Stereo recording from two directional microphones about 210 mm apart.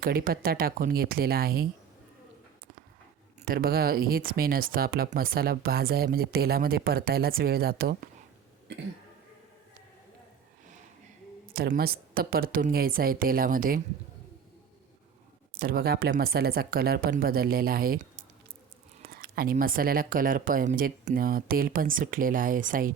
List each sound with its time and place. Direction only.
0.0 s speech: 45° right (ahead or behind)
3.4 s speech: 45° right (ahead or behind)
11.4 s speech: 45° right (ahead or behind)
15.5 s speech: 45° right (ahead or behind)